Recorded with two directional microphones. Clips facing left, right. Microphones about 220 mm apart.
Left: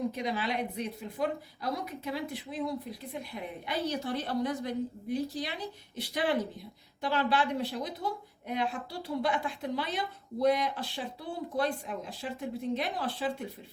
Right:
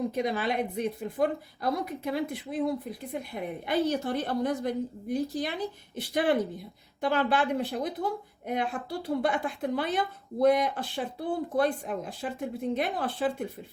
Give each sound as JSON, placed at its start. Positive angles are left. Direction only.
{"t": 0.1, "sound": "a woman's voice", "side_deg": -50}